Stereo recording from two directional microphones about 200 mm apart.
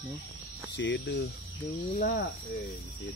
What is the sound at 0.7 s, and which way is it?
Speech, 65° left (ahead or behind).